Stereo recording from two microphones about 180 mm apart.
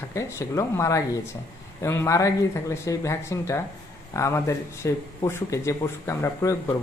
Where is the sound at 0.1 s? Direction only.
15° left (ahead or behind).